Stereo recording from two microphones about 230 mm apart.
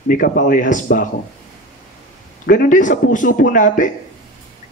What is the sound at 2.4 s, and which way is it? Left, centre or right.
Speech, left.